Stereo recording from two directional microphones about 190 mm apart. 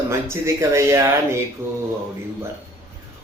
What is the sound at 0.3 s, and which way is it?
A man's voice, 15° right (ahead or behind).